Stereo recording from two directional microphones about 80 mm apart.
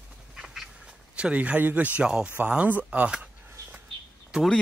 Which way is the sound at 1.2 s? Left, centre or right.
Centre.